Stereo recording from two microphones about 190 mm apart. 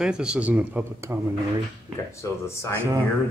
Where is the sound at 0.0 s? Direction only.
5° right (ahead or behind).